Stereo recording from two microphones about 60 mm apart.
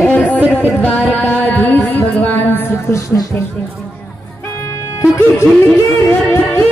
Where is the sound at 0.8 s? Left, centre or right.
Left.